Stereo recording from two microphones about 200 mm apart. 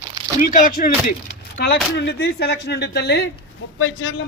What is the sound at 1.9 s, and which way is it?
A man's voice, 55° left (ahead or behind).